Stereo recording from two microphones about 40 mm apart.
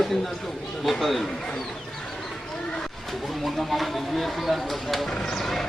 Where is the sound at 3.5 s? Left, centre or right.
Centre.